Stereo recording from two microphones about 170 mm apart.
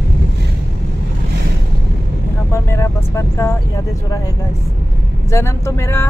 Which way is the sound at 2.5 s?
15° left (ahead or behind).